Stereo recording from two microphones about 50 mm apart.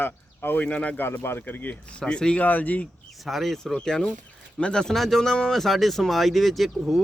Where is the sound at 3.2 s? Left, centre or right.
Centre.